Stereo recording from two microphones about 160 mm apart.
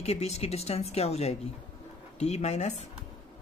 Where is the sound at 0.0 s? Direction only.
40° left (ahead or behind).